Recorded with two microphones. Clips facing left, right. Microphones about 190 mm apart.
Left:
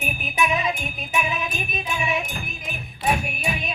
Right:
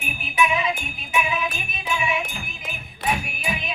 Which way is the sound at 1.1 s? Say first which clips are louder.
Right 2 dB; 40° left (ahead or behind).